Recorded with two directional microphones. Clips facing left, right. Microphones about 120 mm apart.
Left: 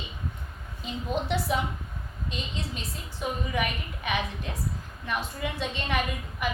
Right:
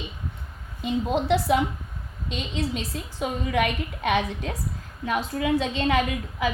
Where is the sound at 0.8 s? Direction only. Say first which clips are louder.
Right 6 dB; 90° right.